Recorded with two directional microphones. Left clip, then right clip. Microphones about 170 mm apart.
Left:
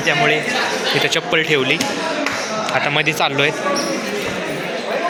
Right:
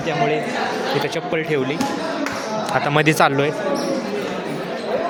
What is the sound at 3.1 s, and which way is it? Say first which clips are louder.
Speech: right 2 dB; 55° right (ahead or behind).